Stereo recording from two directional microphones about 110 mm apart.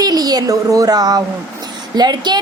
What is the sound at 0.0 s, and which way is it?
A woman's voice, 35° right (ahead or behind).